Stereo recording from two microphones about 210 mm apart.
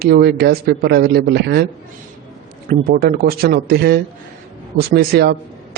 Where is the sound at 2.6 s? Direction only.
45° right (ahead or behind).